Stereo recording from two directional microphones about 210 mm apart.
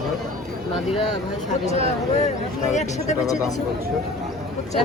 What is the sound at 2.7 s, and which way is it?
Speech, 35° left (ahead or behind).